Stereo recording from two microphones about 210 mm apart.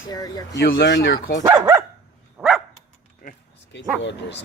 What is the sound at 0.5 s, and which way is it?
Speech, 50° left (ahead or behind).